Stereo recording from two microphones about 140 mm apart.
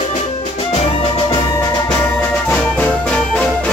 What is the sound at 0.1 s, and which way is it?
Music, 55° left (ahead or behind).